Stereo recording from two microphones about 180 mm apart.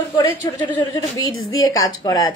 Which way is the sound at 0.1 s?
20° left (ahead or behind).